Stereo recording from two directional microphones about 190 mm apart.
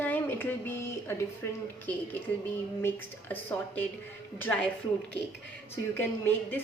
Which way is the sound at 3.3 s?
10° left (ahead or behind).